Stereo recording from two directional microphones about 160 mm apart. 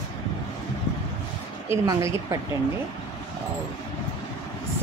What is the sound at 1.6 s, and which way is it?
Speech, 20° right (ahead or behind).